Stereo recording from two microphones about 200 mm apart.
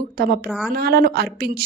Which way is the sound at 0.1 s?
50° right (ahead or behind).